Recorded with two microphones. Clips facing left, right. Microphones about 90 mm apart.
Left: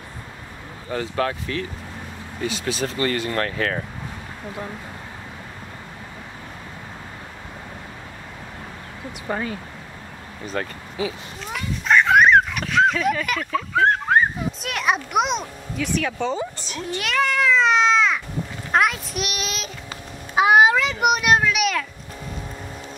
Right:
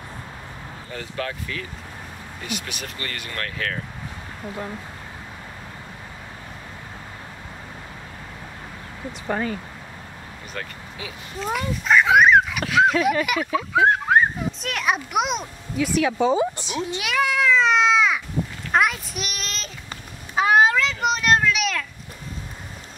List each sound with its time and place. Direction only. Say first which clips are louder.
1.1 s speech: left 4 dB; 45° left (ahead or behind)
2.4 s speech: left 8 dB; 30° left (ahead or behind)
9.3 s speech: right 1 dB; centre (ahead or behind)
10.5 s speech: left 7 dB; 30° left (ahead or behind)
11.5 s speech: even; 5° right (ahead or behind)
18.7 s child singing: left 1 dB; centre (ahead or behind)
20.3 s a sound: left 2 dB; 10° left (ahead or behind)